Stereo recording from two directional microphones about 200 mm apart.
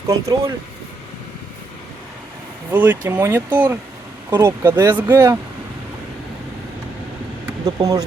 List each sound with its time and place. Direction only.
0.1 s speech: 15° right (ahead or behind)
2.7 s speech: 10° right (ahead or behind)
7.6 s speech: 20° right (ahead or behind)